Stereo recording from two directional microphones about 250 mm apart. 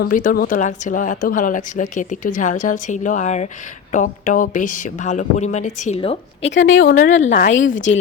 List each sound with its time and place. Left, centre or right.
0.0 s a woman's voice: left
6.5 s speech: left
7.2 s a woman's voice: left
7.5 s speech: left